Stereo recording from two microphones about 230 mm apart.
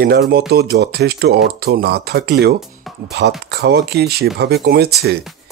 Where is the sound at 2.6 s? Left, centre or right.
Centre.